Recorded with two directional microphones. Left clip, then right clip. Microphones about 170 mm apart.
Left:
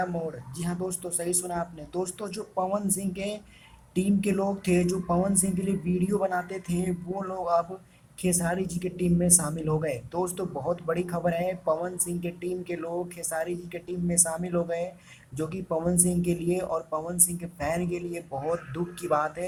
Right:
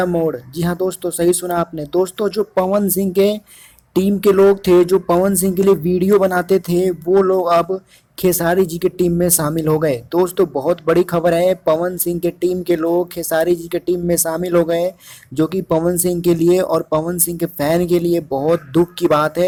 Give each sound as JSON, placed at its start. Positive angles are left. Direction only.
{"t": 0.0, "sound": "speech", "side_deg": -40}